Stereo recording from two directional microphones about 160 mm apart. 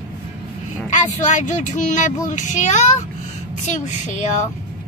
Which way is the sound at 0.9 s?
50° left (ahead or behind).